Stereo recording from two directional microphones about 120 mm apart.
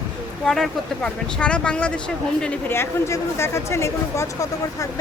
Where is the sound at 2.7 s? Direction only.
20° left (ahead or behind).